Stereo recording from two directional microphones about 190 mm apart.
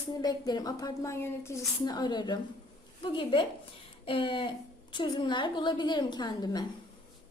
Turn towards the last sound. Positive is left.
turn(degrees=20)  # may be behind; listen again after turning